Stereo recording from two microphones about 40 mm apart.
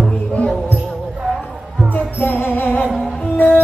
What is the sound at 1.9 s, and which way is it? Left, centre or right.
Music, left.